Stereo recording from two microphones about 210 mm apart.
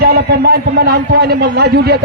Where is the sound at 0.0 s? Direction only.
50° right (ahead or behind).